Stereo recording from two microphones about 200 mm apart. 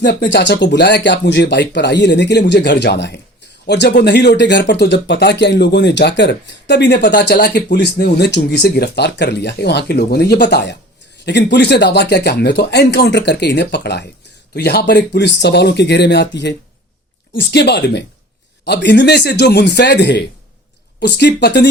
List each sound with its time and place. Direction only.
0.0 s speech: 60° left (ahead or behind)